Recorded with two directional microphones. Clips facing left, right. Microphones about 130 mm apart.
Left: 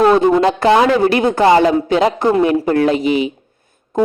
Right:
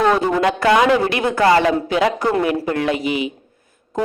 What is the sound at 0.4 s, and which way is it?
A man's voice, 30° left (ahead or behind).